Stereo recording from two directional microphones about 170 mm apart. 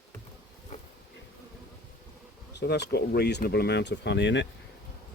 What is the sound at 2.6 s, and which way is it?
Speech, 80° left.